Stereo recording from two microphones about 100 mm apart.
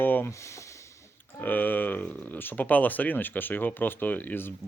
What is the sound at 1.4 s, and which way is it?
Speech, 20° left (ahead or behind).